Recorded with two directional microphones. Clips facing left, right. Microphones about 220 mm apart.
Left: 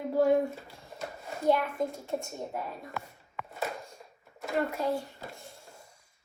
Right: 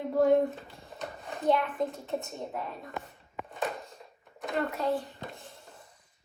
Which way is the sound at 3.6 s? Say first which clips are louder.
Right 2 dB; centre (ahead or behind).